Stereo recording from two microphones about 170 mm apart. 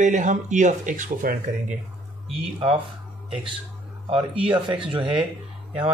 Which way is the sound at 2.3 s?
35° right (ahead or behind).